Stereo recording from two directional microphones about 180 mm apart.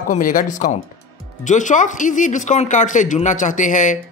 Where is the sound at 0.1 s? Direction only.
50° left (ahead or behind).